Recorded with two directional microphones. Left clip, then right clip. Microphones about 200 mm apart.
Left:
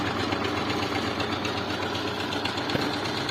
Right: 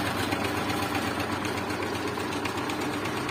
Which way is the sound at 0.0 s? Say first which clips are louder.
Left 1 dB; 15° left (ahead or behind).